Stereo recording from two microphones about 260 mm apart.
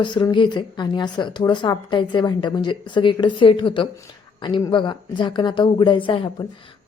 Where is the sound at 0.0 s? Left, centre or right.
Centre.